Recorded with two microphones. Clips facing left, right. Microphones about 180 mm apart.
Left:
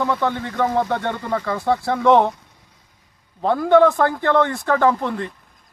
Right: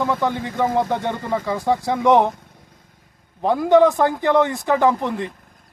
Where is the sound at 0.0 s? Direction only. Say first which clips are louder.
Even; 10° right (ahead or behind).